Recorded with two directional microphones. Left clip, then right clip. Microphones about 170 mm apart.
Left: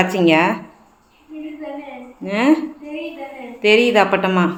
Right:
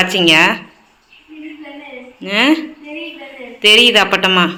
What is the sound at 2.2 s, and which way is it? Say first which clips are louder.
Speech: right 3 dB; 5° left (ahead or behind).